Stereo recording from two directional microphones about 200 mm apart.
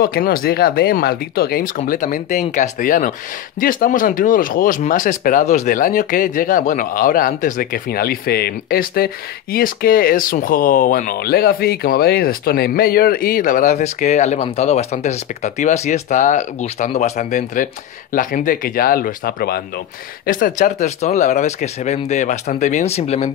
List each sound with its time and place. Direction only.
0.0 s speech: 50° left (ahead or behind); by 23.3 s 35° left (ahead or behind)